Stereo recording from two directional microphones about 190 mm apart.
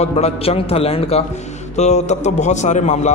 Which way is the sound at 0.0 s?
30° left (ahead or behind).